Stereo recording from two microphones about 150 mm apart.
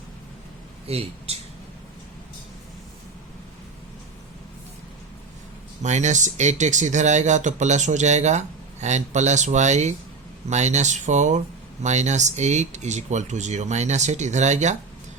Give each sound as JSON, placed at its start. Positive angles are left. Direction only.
{"t": 0.9, "sound": "speech", "side_deg": -40}
{"t": 5.8, "sound": "speech", "side_deg": -50}